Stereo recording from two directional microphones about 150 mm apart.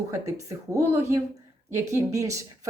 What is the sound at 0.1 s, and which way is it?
Speech, 20° right (ahead or behind).